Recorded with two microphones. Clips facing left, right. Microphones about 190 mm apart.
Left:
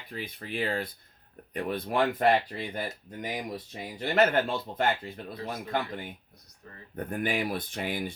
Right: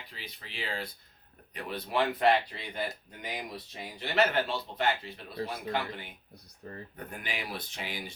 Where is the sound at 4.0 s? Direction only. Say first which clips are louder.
Left 4 dB; 50° left (ahead or behind).